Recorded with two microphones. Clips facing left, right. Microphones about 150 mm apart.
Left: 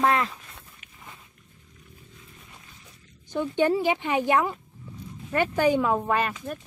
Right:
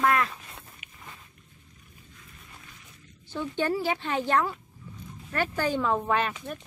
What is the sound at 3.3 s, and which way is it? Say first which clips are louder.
Speech: left 5 dB; 15° left (ahead or behind).